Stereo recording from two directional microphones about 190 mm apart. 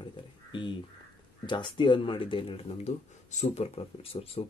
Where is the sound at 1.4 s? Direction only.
25° left (ahead or behind).